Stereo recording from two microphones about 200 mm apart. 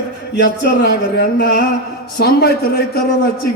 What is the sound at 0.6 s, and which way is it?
A man's voice, 55° left (ahead or behind).